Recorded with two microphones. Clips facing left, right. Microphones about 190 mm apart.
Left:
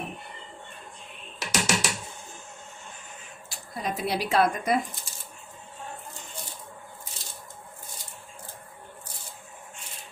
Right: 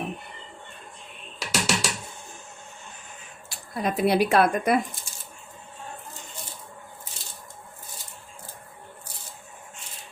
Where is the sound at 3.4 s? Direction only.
60° right (ahead or behind).